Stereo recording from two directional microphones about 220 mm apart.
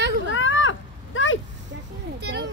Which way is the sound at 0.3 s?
60° left (ahead or behind).